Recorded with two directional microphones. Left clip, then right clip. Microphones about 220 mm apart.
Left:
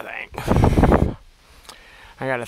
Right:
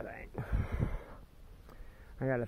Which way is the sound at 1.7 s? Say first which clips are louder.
Left 17 dB; 35° left (ahead or behind).